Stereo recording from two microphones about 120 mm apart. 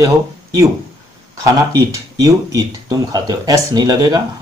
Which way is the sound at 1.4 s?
30° right (ahead or behind).